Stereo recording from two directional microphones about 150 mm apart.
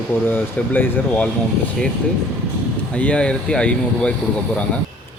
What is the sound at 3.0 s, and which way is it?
Speech, 10° left (ahead or behind).